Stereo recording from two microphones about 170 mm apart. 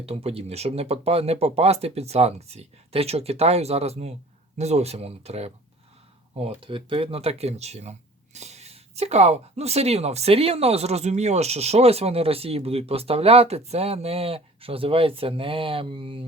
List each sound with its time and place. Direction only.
0.0 s speech: 35° right (ahead or behind)